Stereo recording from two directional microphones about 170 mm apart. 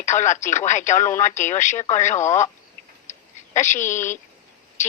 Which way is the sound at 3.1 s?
45° left (ahead or behind).